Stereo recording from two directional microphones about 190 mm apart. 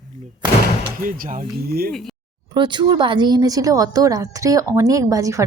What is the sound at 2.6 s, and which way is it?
A woman's voice, 25° right (ahead or behind).